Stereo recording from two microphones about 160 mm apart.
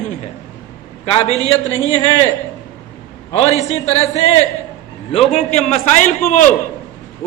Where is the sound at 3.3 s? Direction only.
45° left (ahead or behind).